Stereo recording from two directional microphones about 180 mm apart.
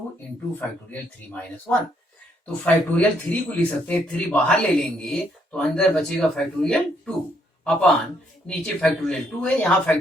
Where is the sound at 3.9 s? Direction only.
5° left (ahead or behind).